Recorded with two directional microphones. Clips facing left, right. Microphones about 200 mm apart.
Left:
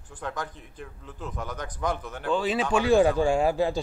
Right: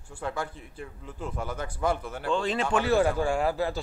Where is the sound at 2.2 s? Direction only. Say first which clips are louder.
Left 2 dB; 5° left (ahead or behind).